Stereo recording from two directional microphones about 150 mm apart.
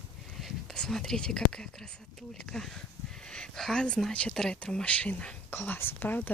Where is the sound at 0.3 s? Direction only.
5° left (ahead or behind).